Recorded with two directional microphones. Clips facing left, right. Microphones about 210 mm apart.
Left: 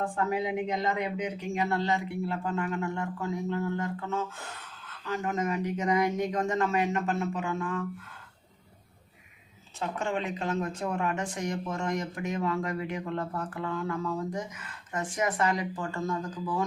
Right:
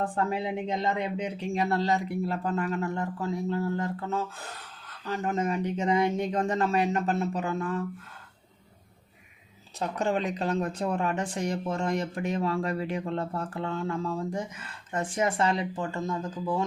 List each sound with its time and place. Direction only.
0.0 s speech: 30° right (ahead or behind)
9.7 s speech: 35° right (ahead or behind)